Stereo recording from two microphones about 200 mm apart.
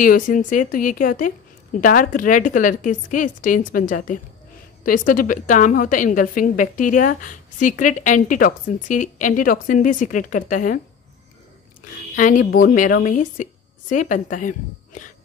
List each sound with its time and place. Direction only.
0.0 s a woman's voice: 40° left (ahead or behind)
12.2 s a woman's voice: 40° left (ahead or behind)